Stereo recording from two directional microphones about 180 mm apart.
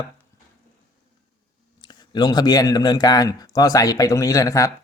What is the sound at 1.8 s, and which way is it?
A man's voice, 25° left (ahead or behind).